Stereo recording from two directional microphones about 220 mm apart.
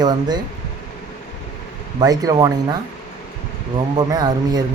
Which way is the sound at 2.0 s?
15° right (ahead or behind).